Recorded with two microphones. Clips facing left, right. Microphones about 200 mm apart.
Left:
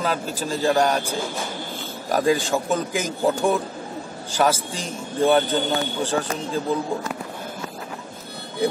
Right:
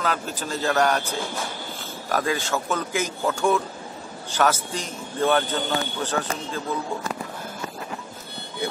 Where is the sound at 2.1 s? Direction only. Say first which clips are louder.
Left 5 dB; 15° left (ahead or behind).